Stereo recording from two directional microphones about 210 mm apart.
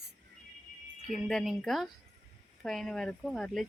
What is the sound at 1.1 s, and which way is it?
Speech, centre (ahead or behind).